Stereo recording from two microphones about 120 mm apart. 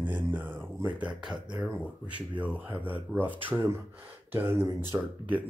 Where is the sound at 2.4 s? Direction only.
10° right (ahead or behind).